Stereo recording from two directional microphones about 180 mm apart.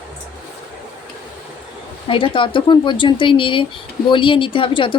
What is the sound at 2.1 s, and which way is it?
A woman's voice, 30° left (ahead or behind).